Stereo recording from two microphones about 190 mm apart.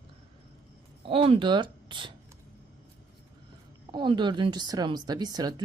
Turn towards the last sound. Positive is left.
turn(degrees=-20)  # may be behind; listen again after turning